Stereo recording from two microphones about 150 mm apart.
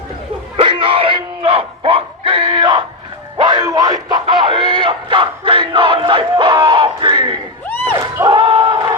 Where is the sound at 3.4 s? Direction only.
30° right (ahead or behind).